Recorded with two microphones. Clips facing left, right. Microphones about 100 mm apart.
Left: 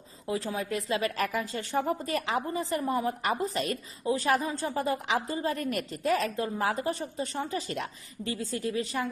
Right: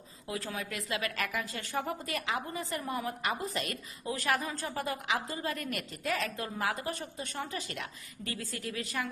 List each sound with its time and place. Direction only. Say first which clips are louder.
0.3 s a woman's voice: left 6 dB; 25° left (ahead or behind)